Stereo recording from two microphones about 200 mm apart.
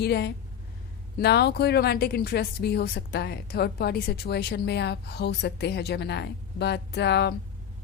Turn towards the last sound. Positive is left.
turn(degrees=55)  # may be behind; listen again after turning